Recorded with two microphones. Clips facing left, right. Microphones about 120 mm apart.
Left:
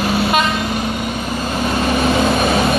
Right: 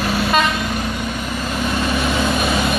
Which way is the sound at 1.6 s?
35° left (ahead or behind).